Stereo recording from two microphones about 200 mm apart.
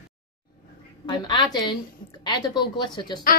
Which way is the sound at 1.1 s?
20° left (ahead or behind).